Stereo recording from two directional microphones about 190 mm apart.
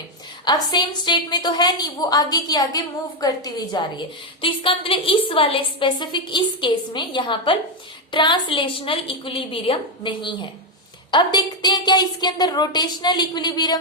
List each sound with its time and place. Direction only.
0.4 s a woman's voice: 20° left (ahead or behind)